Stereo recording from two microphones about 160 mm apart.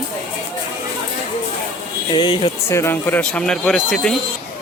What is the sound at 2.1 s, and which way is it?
Speech, 30° left (ahead or behind).